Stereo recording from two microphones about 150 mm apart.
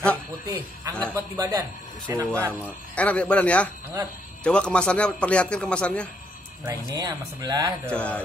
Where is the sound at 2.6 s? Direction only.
10° left (ahead or behind).